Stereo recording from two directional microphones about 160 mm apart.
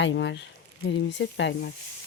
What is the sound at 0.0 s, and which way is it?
Speech, 90° left.